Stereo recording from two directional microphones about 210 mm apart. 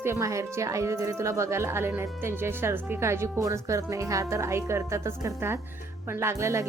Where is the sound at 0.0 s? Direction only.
15° right (ahead or behind).